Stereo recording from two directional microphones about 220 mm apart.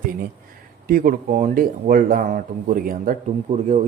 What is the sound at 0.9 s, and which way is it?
A man's voice, 40° right (ahead or behind).